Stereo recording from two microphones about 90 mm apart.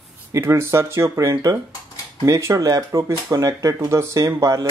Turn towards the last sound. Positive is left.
turn(degrees=-35)  # may be behind; listen again after turning